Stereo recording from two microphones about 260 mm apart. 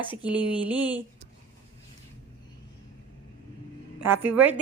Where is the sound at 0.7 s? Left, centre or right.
Centre.